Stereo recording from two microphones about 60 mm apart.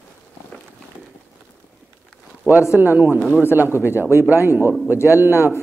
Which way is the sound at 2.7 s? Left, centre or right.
Right.